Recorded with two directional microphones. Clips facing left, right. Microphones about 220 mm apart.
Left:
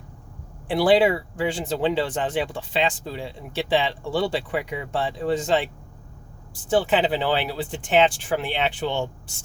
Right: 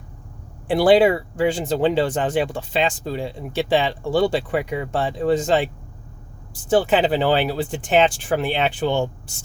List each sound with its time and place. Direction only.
0.8 s speech: 45° right (ahead or behind)
6.7 s speech: 45° right (ahead or behind)